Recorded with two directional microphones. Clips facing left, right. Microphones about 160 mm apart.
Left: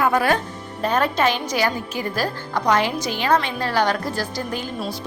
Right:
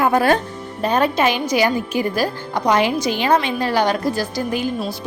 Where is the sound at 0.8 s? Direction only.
15° right (ahead or behind).